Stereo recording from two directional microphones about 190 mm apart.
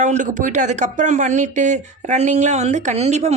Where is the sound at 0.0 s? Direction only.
40° right (ahead or behind).